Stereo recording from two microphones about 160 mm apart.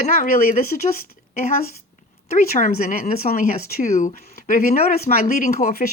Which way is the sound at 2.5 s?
60° left (ahead or behind).